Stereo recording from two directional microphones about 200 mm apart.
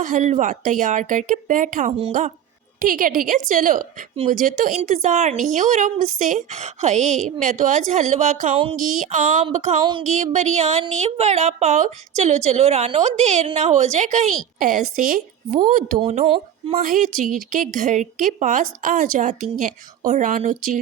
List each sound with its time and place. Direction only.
0.0 s a woman's voice: 40° right (ahead or behind)
16.0 s speech: 30° right (ahead or behind)
16.8 s a woman's voice: 40° right (ahead or behind)